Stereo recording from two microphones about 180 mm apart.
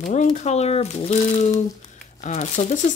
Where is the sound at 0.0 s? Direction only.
40° left (ahead or behind).